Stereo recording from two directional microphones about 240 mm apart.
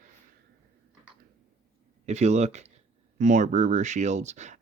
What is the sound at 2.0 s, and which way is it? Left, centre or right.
Speech, right.